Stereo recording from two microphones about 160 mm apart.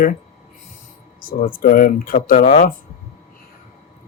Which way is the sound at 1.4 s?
60° left (ahead or behind).